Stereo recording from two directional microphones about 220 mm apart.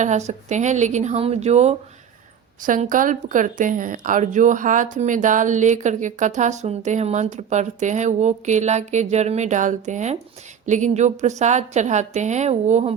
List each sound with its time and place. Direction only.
0.0 s a woman's voice: 30° right (ahead or behind)